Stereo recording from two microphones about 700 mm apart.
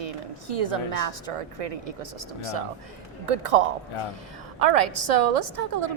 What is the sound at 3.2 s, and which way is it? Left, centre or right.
A woman's voice, right.